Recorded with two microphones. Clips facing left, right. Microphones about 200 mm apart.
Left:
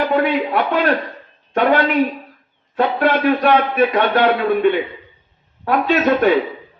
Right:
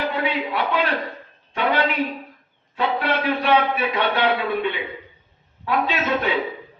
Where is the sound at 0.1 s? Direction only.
50° left (ahead or behind).